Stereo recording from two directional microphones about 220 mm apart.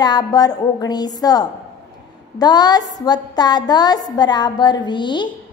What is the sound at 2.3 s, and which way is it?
A woman's voice, 20° left (ahead or behind).